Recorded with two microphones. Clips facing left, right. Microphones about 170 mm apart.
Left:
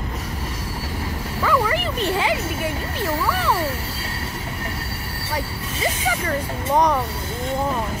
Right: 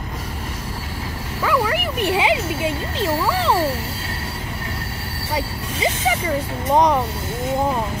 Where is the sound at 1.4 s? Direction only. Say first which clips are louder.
Right 1 dB; 5° right (ahead or behind); by 3.5 s 20° right (ahead or behind).